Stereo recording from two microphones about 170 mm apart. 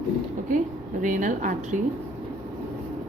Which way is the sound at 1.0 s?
50° right (ahead or behind).